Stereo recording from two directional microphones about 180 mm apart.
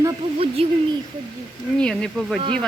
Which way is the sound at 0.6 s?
35° right (ahead or behind).